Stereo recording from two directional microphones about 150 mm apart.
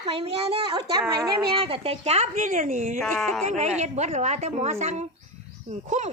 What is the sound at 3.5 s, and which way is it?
Speech, 50° right (ahead or behind).